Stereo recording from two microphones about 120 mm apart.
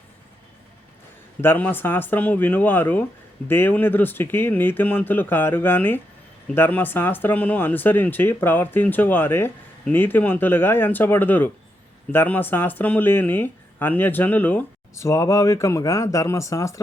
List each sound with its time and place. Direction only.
1.4 s speech: 15° left (ahead or behind)